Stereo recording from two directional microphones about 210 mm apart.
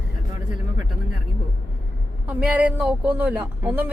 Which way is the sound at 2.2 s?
5° right (ahead or behind).